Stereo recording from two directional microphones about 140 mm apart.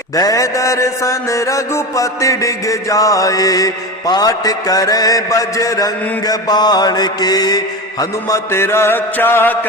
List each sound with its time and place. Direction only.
0.2 s mantra: 25° left (ahead or behind)
8.3 s mantra: 20° left (ahead or behind)